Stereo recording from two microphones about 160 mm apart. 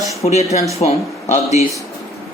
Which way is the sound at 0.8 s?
45° left (ahead or behind).